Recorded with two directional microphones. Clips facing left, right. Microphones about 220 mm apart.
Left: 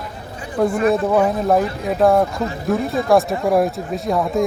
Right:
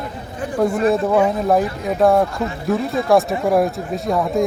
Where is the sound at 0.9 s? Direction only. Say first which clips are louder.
Even; centre (ahead or behind).